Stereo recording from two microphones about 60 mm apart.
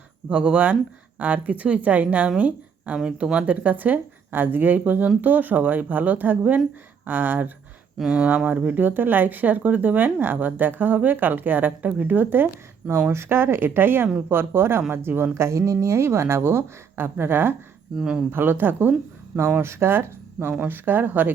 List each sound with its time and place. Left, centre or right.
0.3 s speech: centre
8.1 s speech: centre
8.4 s a woman's voice: right
17.9 s speech: centre
18.3 s speech: right